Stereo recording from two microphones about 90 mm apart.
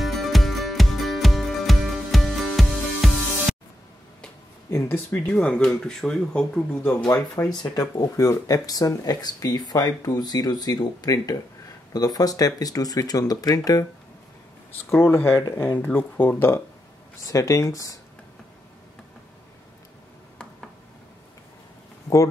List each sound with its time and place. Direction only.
0.0 s music: centre (ahead or behind)
4.6 s speech: 25° left (ahead or behind); by 6.8 s 10° left (ahead or behind)
7.6 s speech: 40° left (ahead or behind)
14.9 s speech: 30° left (ahead or behind)
17.3 s speech: 40° left (ahead or behind)